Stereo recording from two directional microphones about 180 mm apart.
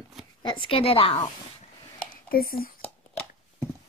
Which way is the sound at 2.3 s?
55° left (ahead or behind).